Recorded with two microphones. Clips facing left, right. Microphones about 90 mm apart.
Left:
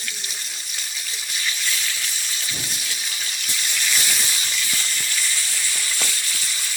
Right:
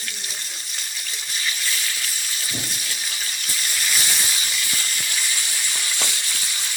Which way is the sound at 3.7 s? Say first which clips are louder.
Even; centre (ahead or behind).